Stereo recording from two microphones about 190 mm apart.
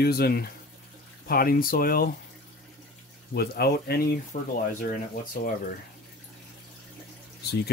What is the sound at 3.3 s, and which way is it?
Speech, 55° left (ahead or behind).